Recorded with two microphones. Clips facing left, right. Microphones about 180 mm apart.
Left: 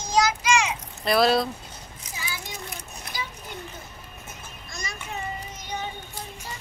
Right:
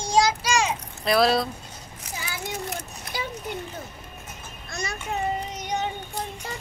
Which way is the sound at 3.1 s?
60° right (ahead or behind).